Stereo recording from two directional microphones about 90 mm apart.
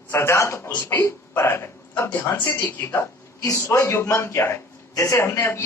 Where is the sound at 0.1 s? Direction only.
30° left (ahead or behind).